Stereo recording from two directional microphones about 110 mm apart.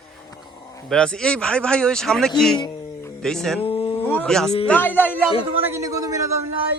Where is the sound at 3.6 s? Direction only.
55° left (ahead or behind).